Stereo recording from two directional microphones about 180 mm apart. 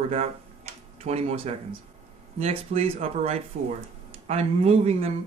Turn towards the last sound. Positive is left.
turn(degrees=-35)  # may be behind; listen again after turning